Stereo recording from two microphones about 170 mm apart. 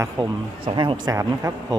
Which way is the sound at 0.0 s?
30° right (ahead or behind).